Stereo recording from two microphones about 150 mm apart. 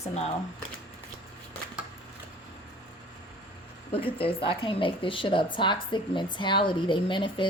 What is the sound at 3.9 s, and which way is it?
A woman's voice, 40° left (ahead or behind).